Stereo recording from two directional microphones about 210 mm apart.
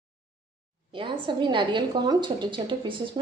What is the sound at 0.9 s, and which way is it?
A woman's voice, 25° right (ahead or behind).